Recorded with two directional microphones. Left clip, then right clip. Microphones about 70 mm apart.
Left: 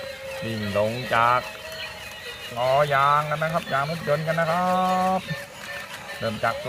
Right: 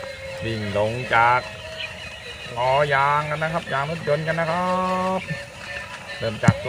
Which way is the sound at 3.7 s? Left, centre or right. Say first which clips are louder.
Right 1 dB; right.